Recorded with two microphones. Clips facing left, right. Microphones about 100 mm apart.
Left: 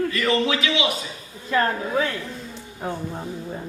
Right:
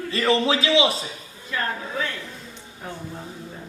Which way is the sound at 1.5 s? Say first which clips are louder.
Left 6 dB; 40° left (ahead or behind).